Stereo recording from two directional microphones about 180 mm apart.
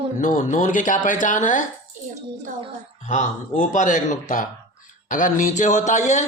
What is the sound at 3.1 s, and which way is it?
A man's voice, 40° left (ahead or behind).